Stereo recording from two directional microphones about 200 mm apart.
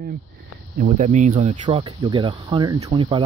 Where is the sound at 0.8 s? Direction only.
35° right (ahead or behind).